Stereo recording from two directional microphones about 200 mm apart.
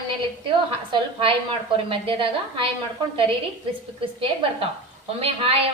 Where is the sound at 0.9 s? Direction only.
25° right (ahead or behind).